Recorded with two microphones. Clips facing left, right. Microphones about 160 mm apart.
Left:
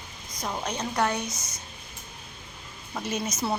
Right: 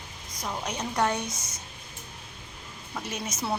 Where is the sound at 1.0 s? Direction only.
20° right (ahead or behind).